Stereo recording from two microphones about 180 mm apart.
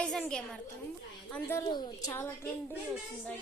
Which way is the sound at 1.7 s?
20° left (ahead or behind).